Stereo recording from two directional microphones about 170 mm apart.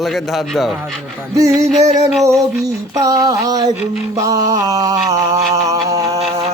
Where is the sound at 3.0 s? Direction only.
20° right (ahead or behind).